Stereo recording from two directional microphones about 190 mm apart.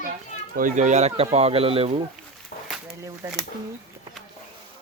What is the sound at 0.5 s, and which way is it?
Speech, 40° right (ahead or behind).